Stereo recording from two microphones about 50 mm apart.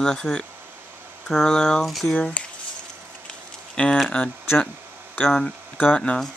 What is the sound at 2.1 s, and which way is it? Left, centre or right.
Speech, left.